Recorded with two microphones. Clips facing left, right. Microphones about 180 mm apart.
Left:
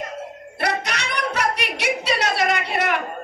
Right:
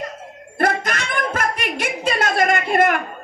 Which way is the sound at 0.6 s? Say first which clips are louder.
Right 4 dB; 50° right (ahead or behind).